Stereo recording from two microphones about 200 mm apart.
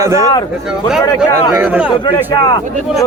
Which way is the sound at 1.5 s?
10° right (ahead or behind).